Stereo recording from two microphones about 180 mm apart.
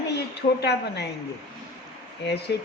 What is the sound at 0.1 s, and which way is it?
A woman's voice, 70° left (ahead or behind).